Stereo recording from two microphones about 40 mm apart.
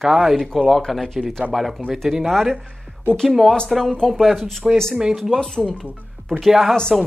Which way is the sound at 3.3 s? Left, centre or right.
Centre.